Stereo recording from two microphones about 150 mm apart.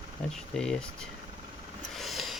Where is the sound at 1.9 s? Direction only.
Centre (ahead or behind).